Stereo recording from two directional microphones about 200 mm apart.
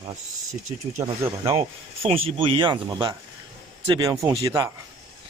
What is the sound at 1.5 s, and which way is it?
A man's voice, 30° right (ahead or behind).